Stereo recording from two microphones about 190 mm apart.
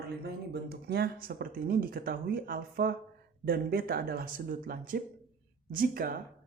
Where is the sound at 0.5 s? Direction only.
60° right (ahead or behind).